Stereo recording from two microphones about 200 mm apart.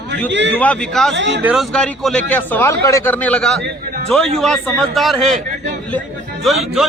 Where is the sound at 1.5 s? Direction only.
Centre (ahead or behind).